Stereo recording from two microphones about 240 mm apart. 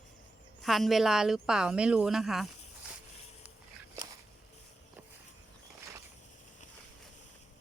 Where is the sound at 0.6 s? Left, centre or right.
Centre.